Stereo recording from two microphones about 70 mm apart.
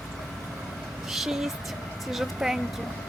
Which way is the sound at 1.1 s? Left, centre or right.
Centre.